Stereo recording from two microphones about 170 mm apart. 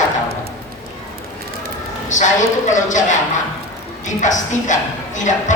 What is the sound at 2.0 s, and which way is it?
Speech, 45° left (ahead or behind).